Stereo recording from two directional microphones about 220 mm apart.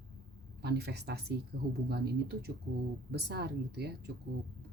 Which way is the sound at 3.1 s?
50° right (ahead or behind).